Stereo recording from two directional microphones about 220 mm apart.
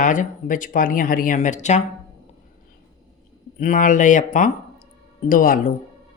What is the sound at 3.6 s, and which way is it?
A woman's voice, 35° left (ahead or behind).